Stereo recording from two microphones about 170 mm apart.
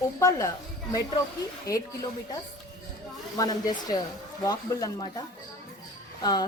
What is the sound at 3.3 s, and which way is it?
A woman's voice, 25° left (ahead or behind).